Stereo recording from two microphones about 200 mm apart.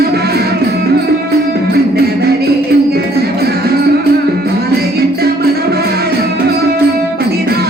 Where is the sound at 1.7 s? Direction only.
50° right (ahead or behind).